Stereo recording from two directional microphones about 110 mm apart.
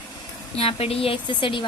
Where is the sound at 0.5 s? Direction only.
65° left (ahead or behind); by 1.6 s 45° left (ahead or behind).